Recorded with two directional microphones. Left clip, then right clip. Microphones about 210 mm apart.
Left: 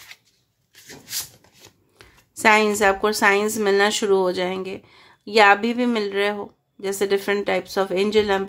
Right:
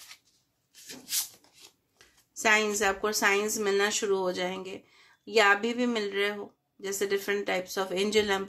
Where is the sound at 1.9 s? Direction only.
30° left (ahead or behind).